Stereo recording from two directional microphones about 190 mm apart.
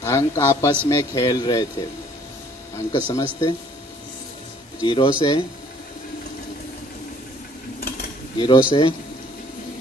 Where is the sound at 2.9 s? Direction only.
20° left (ahead or behind).